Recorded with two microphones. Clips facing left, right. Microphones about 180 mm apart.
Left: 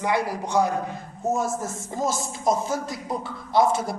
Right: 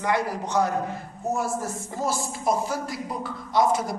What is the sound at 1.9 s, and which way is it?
Speech, 20° left (ahead or behind).